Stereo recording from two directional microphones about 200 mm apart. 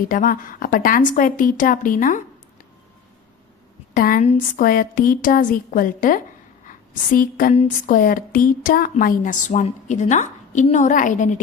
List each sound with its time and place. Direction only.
0.1 s a woman's voice: 45° left (ahead or behind)
3.9 s a woman's voice: 45° left (ahead or behind)
7.5 s a woman's voice: 30° left (ahead or behind)
7.9 s a woman's voice: 45° left (ahead or behind)